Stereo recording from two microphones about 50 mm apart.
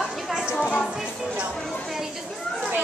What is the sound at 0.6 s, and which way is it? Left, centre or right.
Music, centre.